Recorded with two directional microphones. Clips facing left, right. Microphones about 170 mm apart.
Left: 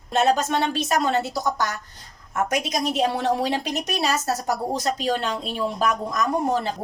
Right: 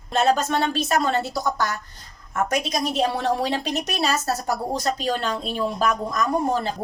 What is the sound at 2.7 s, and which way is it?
A woman's voice, 15° left (ahead or behind).